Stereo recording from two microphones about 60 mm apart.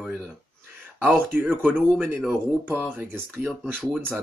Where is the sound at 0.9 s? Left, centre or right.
Right.